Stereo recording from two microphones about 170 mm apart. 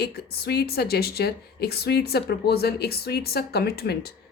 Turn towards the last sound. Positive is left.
turn(degrees=70)  # may be behind; listen again after turning